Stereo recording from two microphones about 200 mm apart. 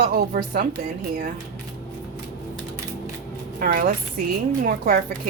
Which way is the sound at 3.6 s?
45° right (ahead or behind).